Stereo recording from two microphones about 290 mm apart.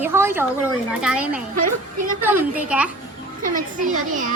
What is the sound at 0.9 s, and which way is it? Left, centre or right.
A woman's voice, centre.